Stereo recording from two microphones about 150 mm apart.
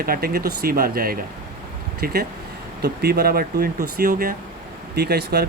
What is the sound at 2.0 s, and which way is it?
Speech, 90° right.